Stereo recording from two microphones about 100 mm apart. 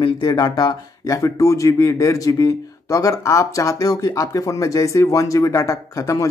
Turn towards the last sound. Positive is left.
turn(degrees=35)  # may be behind; listen again after turning